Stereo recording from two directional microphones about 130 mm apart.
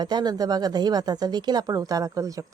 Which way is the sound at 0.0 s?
35° right (ahead or behind).